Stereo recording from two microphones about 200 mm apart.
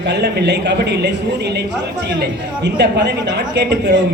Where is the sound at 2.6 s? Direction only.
55° right (ahead or behind).